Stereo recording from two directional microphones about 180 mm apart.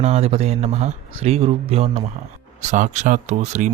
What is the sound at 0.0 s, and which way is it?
Speech, 35° right (ahead or behind).